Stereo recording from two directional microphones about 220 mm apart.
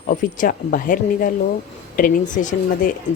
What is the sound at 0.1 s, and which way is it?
A woman's voice, 40° left (ahead or behind).